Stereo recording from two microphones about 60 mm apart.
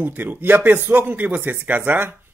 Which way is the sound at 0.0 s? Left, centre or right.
Right.